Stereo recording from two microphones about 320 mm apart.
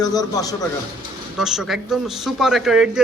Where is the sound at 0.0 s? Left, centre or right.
Centre.